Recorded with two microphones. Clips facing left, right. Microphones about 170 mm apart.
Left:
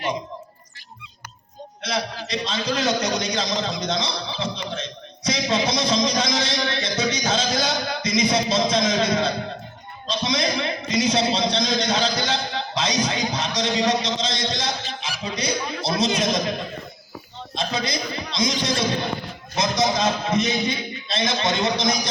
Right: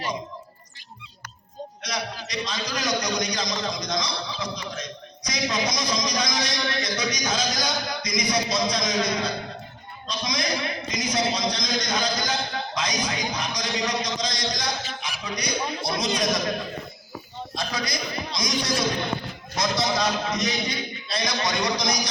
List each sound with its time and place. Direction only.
1.8 s a man's voice: 25° left (ahead or behind)
17.5 s a man's voice: 25° left (ahead or behind)